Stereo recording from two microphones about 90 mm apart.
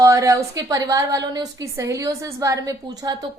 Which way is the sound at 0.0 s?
35° right (ahead or behind).